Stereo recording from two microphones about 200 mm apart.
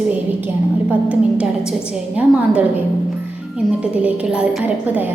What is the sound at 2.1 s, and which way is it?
Speech, 5° right (ahead or behind).